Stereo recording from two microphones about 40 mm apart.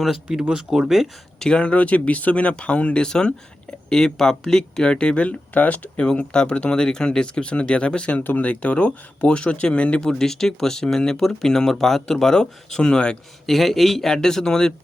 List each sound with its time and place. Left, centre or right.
0.5 s speech: centre
1.4 s speech: left
1.6 s speech: left
3.0 s speech: left
4.9 s speech: left
6.3 s speech: left
10.0 s speech: centre
13.5 s a man's voice: centre